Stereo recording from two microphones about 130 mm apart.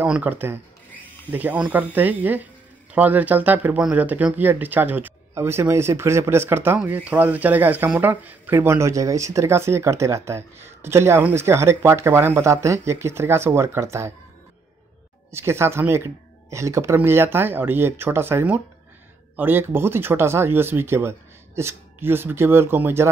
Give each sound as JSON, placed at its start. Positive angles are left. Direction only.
{"t": 0.0, "sound": "speech", "side_deg": -15}
{"t": 15.3, "sound": "speech", "side_deg": -20}